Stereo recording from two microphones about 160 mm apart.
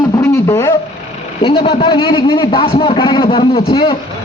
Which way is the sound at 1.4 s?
35° left (ahead or behind).